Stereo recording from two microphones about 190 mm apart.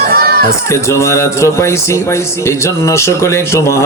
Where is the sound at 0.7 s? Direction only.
15° left (ahead or behind).